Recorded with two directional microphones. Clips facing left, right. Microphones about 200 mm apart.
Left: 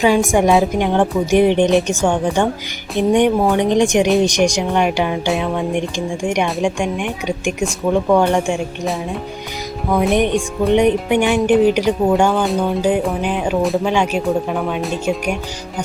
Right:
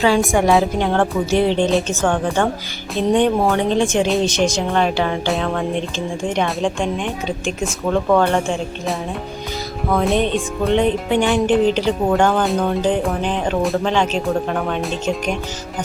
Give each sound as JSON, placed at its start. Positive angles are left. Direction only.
{"t": 0.3, "sound": "speech", "side_deg": 15}
{"t": 9.9, "sound": "speech", "side_deg": 15}
{"t": 12.4, "sound": "music", "side_deg": 0}
{"t": 13.8, "sound": "speech", "side_deg": 10}